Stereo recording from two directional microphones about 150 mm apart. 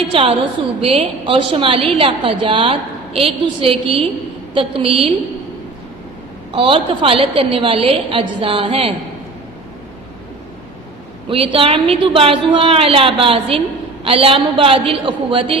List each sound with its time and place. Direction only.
0.1 s a woman's voice: 35° right (ahead or behind)
6.5 s a woman's voice: 35° right (ahead or behind)
11.3 s a woman's voice: 40° right (ahead or behind)